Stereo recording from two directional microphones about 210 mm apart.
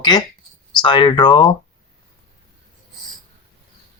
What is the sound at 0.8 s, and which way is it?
Speech, 20° left (ahead or behind).